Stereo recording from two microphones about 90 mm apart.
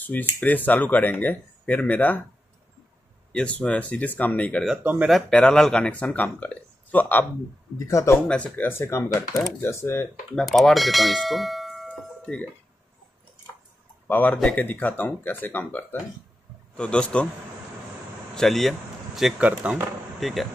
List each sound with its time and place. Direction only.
0.0 s speech: 20° left (ahead or behind)
3.3 s speech: 15° left (ahead or behind)
7.8 s speech: 35° left (ahead or behind)
8.3 s speech: 10° left (ahead or behind); by 10.0 s 30° left (ahead or behind)
10.3 s bell: centre (ahead or behind)
14.0 s speech: 20° left (ahead or behind)
18.3 s speech: 5° left (ahead or behind)
19.4 s speech: 15° right (ahead or behind)
20.2 s speech: centre (ahead or behind)